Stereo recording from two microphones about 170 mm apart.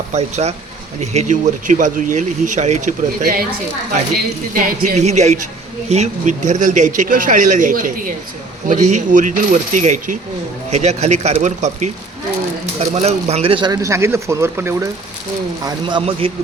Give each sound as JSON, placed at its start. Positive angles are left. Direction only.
{"t": 0.1, "sound": "speech", "side_deg": -40}
{"t": 4.5, "sound": "a man's voice", "side_deg": -40}
{"t": 15.6, "sound": "speech", "side_deg": -30}